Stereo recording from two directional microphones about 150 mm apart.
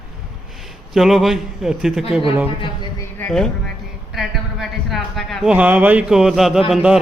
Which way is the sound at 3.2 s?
5° left (ahead or behind).